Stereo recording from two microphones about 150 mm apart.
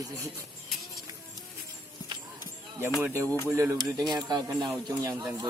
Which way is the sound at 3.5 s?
20° right (ahead or behind).